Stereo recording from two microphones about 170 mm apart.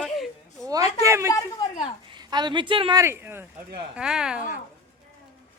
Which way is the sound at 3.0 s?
15° right (ahead or behind).